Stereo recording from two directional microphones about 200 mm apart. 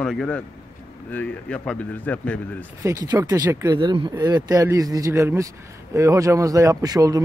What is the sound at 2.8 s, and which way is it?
Speech, 15° right (ahead or behind).